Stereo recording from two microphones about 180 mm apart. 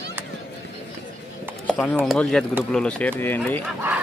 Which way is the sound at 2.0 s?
5° left (ahead or behind).